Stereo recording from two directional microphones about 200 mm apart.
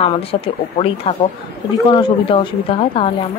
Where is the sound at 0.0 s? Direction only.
30° left (ahead or behind).